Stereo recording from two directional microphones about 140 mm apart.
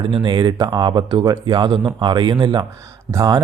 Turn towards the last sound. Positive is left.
turn(degrees=-25)  # may be behind; listen again after turning